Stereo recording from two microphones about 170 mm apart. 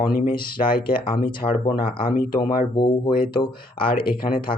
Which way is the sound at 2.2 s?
55° left (ahead or behind).